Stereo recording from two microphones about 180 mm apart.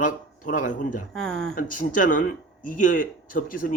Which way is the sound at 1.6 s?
50° left (ahead or behind).